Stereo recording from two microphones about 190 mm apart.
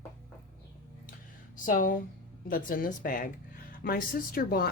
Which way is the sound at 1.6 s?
45° left (ahead or behind).